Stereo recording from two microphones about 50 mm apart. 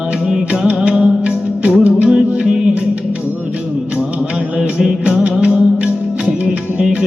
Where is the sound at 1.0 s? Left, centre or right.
Right.